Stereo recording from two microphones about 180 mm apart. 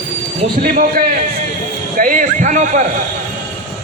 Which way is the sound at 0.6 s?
50° right (ahead or behind).